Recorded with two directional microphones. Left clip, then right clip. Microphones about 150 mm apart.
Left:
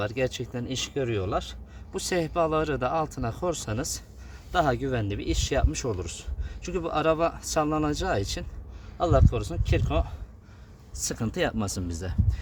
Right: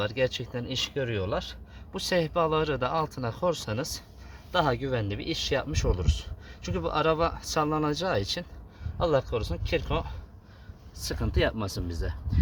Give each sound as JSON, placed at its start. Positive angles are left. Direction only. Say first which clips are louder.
{"t": 0.0, "sound": "speech", "louder": "right 1 dB", "side_deg": 25}
{"t": 10.9, "sound": "speech", "louder": "left 1 dB", "side_deg": 55}